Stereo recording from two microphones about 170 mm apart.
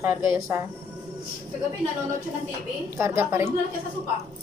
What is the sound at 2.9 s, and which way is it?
Speech, 15° right (ahead or behind).